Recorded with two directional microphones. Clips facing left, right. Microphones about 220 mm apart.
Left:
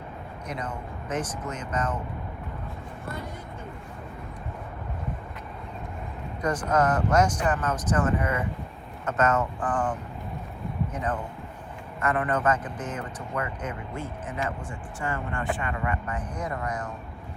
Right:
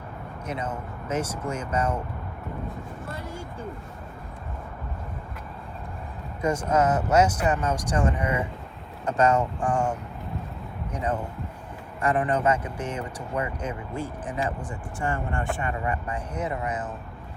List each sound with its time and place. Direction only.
0.6 s speech: 10° right (ahead or behind)
6.4 s speech: 25° right (ahead or behind)
6.7 s speech: 5° right (ahead or behind)
11.9 s a man's voice: 30° right (ahead or behind)
12.4 s speech: 10° right (ahead or behind)
12.8 s speech: 30° right (ahead or behind)
16.6 s speech: 5° right (ahead or behind)